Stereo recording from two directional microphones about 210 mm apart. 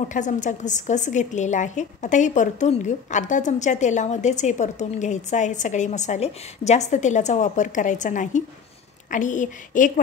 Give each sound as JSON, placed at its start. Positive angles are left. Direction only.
{"t": 0.1, "sound": "a woman's voice", "side_deg": 35}